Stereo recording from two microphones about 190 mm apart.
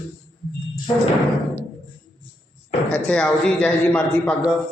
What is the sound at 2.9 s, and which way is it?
A man's voice, 5° left (ahead or behind).